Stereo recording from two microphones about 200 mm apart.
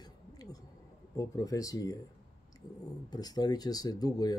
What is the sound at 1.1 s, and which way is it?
Speech, 15° left (ahead or behind).